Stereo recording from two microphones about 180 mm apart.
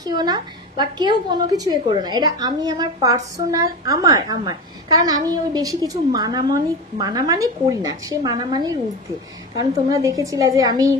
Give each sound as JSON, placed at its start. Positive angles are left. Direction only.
{"t": 0.0, "sound": "a woman's voice", "side_deg": -25}